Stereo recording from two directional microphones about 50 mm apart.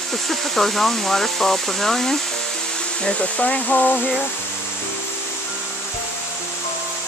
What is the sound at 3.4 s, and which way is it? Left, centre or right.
Speech, left.